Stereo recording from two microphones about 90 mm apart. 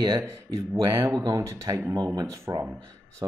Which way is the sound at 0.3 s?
35° right (ahead or behind).